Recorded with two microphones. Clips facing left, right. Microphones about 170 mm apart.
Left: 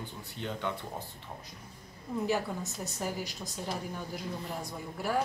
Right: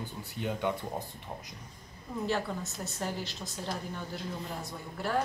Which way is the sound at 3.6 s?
5° left (ahead or behind).